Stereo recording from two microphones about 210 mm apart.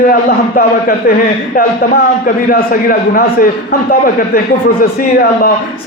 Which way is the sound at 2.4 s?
45° left (ahead or behind).